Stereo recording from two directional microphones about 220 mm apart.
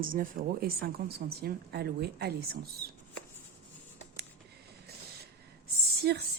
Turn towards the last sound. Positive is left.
turn(degrees=-45)  # may be behind; listen again after turning